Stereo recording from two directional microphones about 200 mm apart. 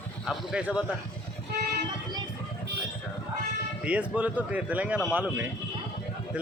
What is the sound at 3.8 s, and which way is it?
A man's voice, 5° right (ahead or behind).